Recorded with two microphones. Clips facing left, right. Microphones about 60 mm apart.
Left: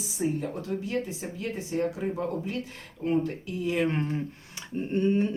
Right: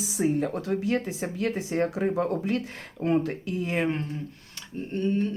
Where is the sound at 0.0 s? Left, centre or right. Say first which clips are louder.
Right 4 dB; right.